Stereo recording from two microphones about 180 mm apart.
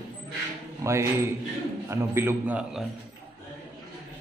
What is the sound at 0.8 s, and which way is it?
A man's voice, 15° right (ahead or behind).